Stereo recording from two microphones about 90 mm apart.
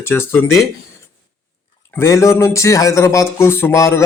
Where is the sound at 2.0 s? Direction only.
35° left (ahead or behind).